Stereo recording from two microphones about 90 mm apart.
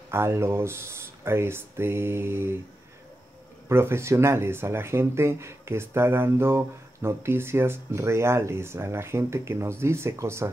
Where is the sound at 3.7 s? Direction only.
30° right (ahead or behind).